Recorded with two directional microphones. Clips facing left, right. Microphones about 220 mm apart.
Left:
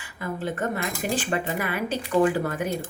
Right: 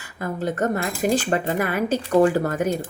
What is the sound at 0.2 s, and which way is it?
Speech, 40° right (ahead or behind).